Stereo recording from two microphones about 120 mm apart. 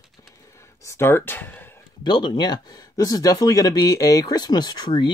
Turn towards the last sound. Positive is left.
turn(degrees=35)  # may be behind; listen again after turning